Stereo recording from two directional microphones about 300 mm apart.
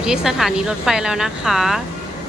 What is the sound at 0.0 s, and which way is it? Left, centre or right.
Speech, centre.